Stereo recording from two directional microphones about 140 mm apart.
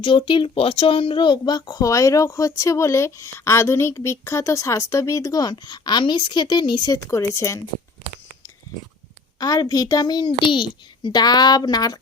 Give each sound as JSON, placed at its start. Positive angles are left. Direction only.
{"t": 0.0, "sound": "speech", "side_deg": 35}
{"t": 9.4, "sound": "speech", "side_deg": 30}